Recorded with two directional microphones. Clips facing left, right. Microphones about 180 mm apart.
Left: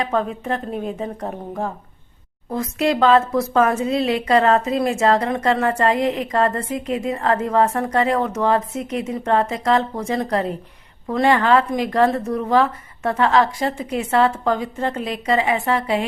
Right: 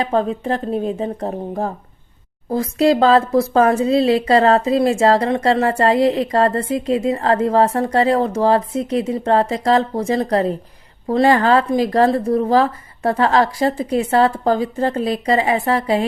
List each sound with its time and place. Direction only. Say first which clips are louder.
0.0 s speech: right 3 dB; 30° right (ahead or behind)